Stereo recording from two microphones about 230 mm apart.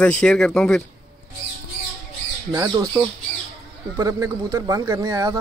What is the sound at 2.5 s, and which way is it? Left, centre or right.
Speech, centre.